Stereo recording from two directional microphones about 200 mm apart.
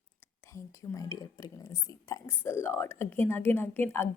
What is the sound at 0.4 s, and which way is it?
Speech, 15° left (ahead or behind).